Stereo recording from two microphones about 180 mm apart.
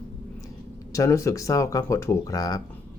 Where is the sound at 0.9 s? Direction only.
15° left (ahead or behind).